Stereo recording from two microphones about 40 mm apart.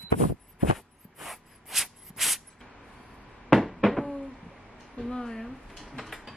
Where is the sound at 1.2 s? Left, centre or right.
Centre.